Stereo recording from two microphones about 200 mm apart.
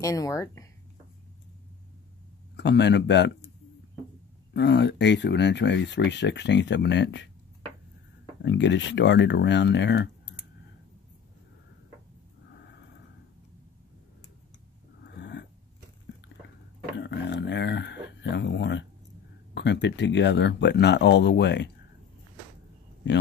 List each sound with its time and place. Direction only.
0.0 s speech: 15° left (ahead or behind)
2.5 s speech: 60° left (ahead or behind)
4.6 s speech: 60° left (ahead or behind)
8.4 s speech: 60° left (ahead or behind)
15.1 s a sound: 60° left (ahead or behind)
17.0 s a sound: 60° left (ahead or behind)
18.2 s speech: 60° left (ahead or behind)
23.0 s speech: 65° left (ahead or behind)